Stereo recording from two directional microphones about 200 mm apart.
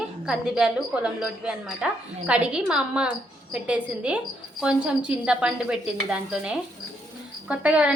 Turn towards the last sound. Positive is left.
turn(degrees=-5)  # may be behind; listen again after turning